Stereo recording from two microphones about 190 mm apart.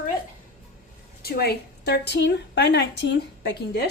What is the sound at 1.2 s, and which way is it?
A woman's voice, 55° left (ahead or behind).